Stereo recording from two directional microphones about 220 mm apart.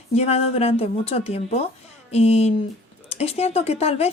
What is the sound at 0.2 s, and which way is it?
Speech, 30° left (ahead or behind).